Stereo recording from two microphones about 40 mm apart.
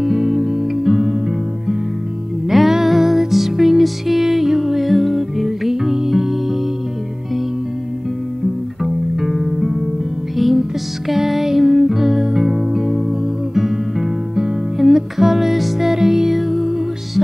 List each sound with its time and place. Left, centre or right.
0.0 s music: centre
2.5 s music: centre
8.8 s music: centre